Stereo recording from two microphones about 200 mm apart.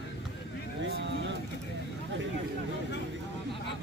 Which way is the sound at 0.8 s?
65° right (ahead or behind).